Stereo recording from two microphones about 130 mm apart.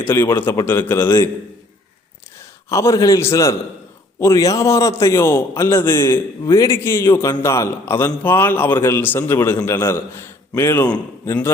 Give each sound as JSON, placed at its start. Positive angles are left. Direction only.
{"t": 0.0, "sound": "a man's voice", "side_deg": 20}
{"t": 2.4, "sound": "a man's voice", "side_deg": 20}
{"t": 10.8, "sound": "a man's voice", "side_deg": 30}